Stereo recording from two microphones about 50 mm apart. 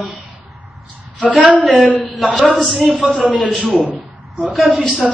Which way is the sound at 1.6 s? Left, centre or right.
Centre.